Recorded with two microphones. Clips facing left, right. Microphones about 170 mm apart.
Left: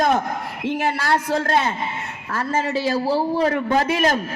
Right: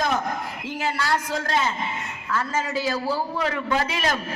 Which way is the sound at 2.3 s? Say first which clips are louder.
Left 3 dB; 30° left (ahead or behind).